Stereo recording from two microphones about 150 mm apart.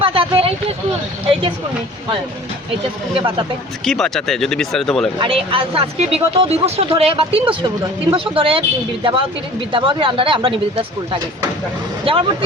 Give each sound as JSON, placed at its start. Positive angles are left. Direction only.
{"t": 0.0, "sound": "a sound", "side_deg": -35}
{"t": 3.2, "sound": "speech", "side_deg": -35}
{"t": 3.8, "sound": "speech", "side_deg": 5}
{"t": 5.2, "sound": "speech", "side_deg": -35}
{"t": 9.7, "sound": "speech", "side_deg": -35}